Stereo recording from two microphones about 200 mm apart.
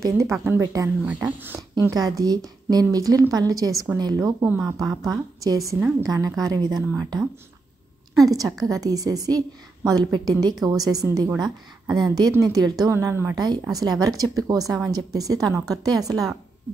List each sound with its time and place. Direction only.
0.0 s a woman's voice: 15° right (ahead or behind)
8.2 s a woman's voice: 20° right (ahead or behind)